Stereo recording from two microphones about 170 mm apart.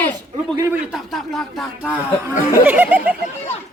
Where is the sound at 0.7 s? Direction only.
5° right (ahead or behind).